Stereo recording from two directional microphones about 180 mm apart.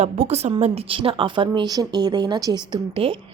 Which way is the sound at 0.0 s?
40° right (ahead or behind).